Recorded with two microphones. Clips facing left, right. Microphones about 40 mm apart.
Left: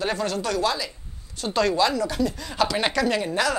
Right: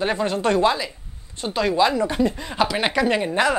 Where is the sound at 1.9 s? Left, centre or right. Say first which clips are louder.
Right 4 dB; right.